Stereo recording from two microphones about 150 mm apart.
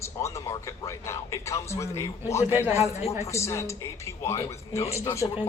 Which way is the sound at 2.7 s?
45° left (ahead or behind).